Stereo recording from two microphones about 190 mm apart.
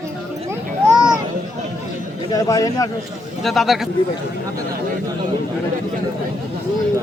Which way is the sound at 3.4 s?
Centre (ahead or behind).